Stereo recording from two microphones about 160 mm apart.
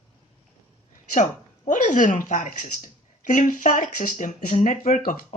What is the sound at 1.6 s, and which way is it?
Speech, 55° left (ahead or behind).